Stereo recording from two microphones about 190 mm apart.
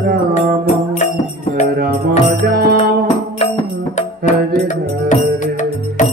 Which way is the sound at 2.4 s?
55° right (ahead or behind).